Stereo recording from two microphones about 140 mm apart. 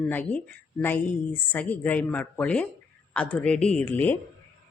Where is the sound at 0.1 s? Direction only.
10° left (ahead or behind).